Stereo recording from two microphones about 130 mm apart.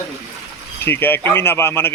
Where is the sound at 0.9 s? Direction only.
15° left (ahead or behind).